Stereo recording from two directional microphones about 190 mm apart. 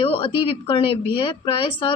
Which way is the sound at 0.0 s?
30° left (ahead or behind).